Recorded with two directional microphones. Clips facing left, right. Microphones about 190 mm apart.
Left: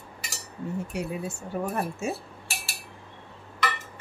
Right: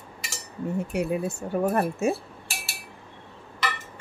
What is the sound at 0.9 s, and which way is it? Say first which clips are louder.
Speech: right 6 dB; 60° right (ahead or behind).